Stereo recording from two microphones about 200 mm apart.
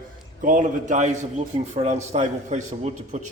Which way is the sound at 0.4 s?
40° right (ahead or behind).